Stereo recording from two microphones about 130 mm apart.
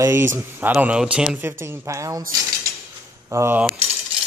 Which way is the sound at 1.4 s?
20° right (ahead or behind).